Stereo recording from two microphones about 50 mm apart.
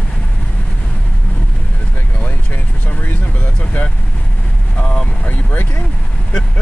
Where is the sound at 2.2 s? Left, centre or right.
Left.